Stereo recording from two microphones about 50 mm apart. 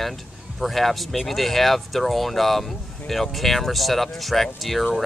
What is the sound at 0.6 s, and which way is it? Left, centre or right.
Speech, centre.